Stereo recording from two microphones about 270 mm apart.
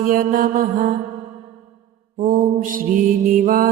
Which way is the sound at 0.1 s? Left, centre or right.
Right.